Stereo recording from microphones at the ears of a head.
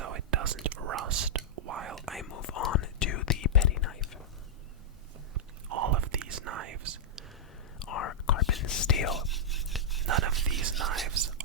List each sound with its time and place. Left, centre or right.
0.0 s whispering: right
2.2 s whispering: left
5.3 s whispering: right
7.8 s whispering: left
9.3 s rub: centre
10.4 s whispering: right